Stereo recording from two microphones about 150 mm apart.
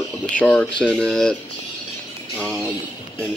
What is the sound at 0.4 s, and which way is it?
Speech, 5° left (ahead or behind).